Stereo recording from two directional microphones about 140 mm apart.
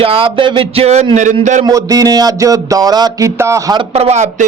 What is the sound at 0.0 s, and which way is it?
Speech, 40° right (ahead or behind).